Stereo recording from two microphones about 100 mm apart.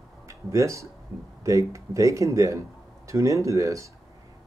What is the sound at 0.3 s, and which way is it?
Speech, 30° right (ahead or behind).